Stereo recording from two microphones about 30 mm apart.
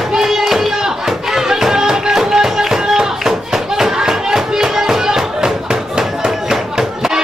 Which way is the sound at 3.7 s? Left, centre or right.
Centre.